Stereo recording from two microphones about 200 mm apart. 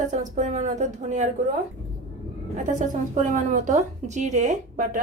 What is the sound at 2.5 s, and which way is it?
A woman's voice, 35° right (ahead or behind).